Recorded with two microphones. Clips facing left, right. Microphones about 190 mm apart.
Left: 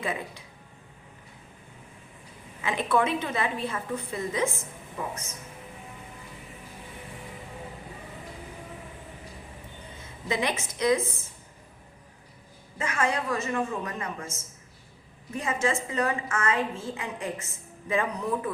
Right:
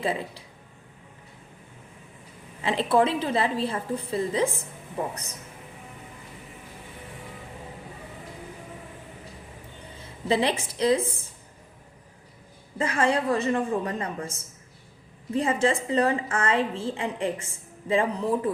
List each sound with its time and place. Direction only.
0.0 s a woman's voice: 30° right (ahead or behind)
2.6 s a woman's voice: 30° right (ahead or behind)
10.2 s a woman's voice: 30° right (ahead or behind)
12.8 s a woman's voice: 30° right (ahead or behind)